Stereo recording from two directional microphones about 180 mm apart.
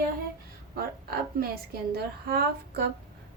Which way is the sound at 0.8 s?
55° right (ahead or behind).